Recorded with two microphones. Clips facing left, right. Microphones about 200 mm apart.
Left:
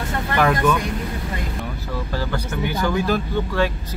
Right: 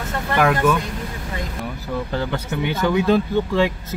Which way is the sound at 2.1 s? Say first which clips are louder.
Even; 20° right (ahead or behind).